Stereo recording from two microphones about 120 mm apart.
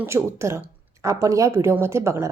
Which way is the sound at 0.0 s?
20° right (ahead or behind).